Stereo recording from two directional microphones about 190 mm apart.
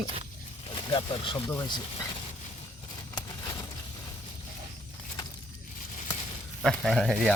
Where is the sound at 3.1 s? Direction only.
20° left (ahead or behind).